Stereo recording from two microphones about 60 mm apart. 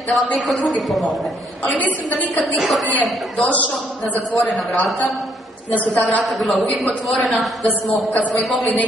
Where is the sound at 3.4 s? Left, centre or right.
Left.